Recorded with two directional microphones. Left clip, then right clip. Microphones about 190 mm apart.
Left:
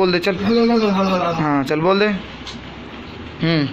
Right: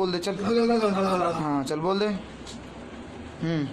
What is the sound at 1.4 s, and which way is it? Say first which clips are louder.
Speech: left 9 dB; centre (ahead or behind).